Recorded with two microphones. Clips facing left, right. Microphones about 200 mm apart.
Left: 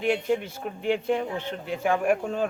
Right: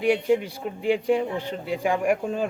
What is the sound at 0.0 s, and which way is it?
A man's voice, 10° right (ahead or behind).